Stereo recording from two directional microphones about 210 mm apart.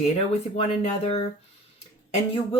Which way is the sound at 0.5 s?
30° left (ahead or behind).